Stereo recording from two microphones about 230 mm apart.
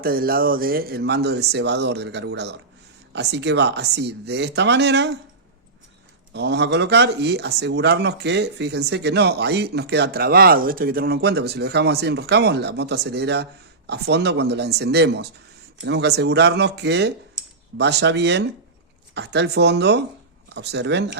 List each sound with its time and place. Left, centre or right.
0.0 s speech: right
6.3 s speech: right